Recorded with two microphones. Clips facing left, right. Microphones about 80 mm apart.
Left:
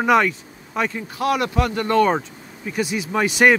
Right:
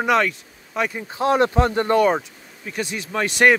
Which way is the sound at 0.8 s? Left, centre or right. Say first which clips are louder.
Right 2 dB; right.